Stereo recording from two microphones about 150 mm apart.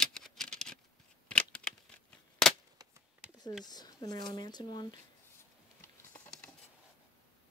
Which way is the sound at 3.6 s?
25° left (ahead or behind).